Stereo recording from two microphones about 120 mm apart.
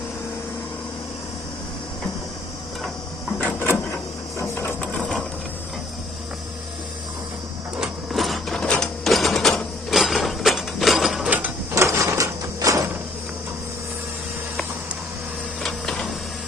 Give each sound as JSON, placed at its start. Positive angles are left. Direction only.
{"t": 3.3, "sound": "printer", "side_deg": 15}
{"t": 4.4, "sound": "sewing machine", "side_deg": 20}
{"t": 7.8, "sound": "printer", "side_deg": 0}
{"t": 11.3, "sound": "mechanisms", "side_deg": -15}
{"t": 11.7, "sound": "a sound", "side_deg": -25}
{"t": 15.6, "sound": "printer", "side_deg": 5}